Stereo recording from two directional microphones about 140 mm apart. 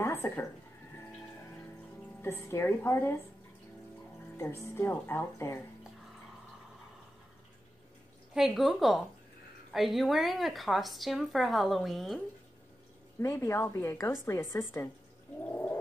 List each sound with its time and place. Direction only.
0.0 s a sound: 15° left (ahead or behind)
2.2 s a woman's voice: 20° left (ahead or behind)
4.4 s speech: 20° left (ahead or behind)
8.4 s speech: centre (ahead or behind)
13.2 s speech: 20° left (ahead or behind)
15.4 s gargling: 15° left (ahead or behind)